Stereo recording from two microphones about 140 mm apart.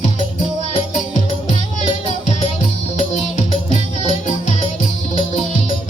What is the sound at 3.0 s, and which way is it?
Music, 60° left (ahead or behind).